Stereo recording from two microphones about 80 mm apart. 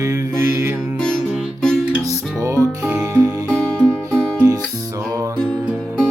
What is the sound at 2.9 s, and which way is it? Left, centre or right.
Music, centre.